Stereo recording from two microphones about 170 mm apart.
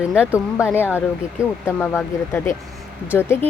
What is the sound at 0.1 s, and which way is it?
Speech, 5° right (ahead or behind).